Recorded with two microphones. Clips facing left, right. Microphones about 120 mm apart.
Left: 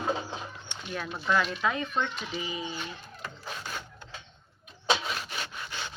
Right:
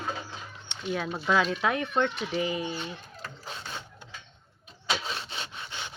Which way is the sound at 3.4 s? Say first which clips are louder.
Left 1 dB; 25° right (ahead or behind).